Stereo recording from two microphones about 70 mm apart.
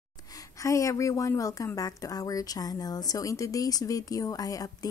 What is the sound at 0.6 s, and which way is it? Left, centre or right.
A woman's voice, left.